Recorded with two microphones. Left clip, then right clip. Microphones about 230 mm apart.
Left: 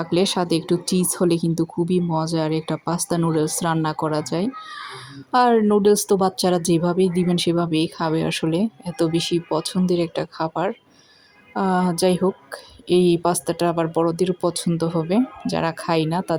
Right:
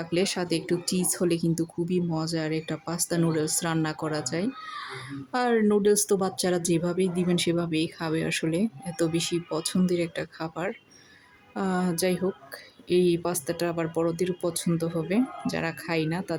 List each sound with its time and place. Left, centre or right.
0.0 s speech: centre